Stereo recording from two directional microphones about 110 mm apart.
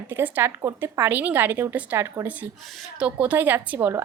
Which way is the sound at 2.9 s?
10° right (ahead or behind).